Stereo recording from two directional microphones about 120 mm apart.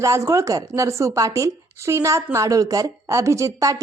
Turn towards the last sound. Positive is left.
turn(degrees=-25)  # may be behind; listen again after turning